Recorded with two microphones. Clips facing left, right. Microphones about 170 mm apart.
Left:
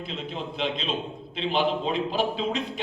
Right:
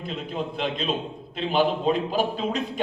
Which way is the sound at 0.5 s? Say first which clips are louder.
Even; 45° right (ahead or behind).